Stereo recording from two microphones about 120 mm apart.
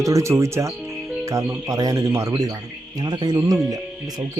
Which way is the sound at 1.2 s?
25° right (ahead or behind).